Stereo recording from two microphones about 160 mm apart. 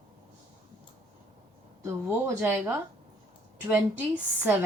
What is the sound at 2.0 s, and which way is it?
Speech, 15° right (ahead or behind).